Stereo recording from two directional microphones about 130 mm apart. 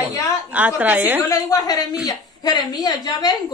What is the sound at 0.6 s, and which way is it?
Speech, 10° right (ahead or behind).